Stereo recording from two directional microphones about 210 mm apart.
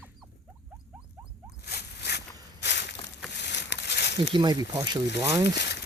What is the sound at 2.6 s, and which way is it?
Walk, 55° left (ahead or behind).